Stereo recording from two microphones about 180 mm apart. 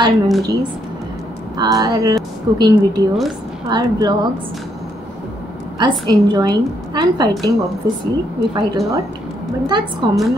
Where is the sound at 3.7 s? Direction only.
25° right (ahead or behind).